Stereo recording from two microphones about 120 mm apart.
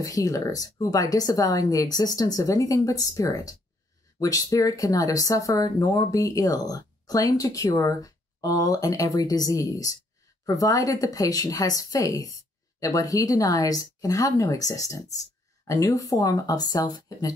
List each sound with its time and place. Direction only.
0.0 s speech: 30° left (ahead or behind)